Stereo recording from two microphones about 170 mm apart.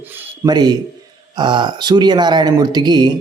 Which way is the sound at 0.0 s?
10° right (ahead or behind).